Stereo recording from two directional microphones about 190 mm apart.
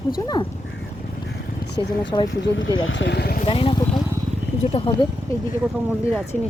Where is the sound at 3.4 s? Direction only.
30° left (ahead or behind).